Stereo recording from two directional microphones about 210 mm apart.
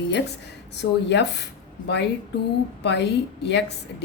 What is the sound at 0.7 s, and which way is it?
Speech, 55° left (ahead or behind).